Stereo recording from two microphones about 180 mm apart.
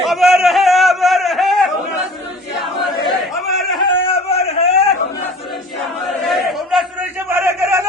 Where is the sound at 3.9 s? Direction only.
30° left (ahead or behind).